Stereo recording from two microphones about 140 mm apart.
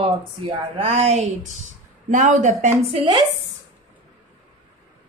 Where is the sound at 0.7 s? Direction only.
45° right (ahead or behind); by 2.7 s 60° right (ahead or behind).